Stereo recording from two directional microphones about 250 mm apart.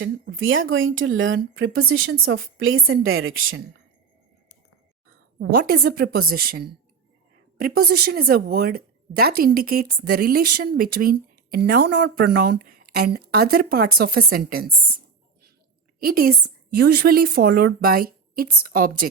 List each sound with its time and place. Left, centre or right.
0.0 s speech: right
5.6 s speech: right
16.0 s a woman's voice: right